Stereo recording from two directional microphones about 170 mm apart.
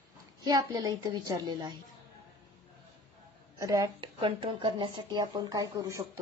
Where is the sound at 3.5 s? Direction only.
20° right (ahead or behind).